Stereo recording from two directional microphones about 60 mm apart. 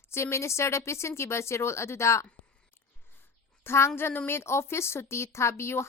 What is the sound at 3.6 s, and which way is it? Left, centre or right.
A woman's voice, left.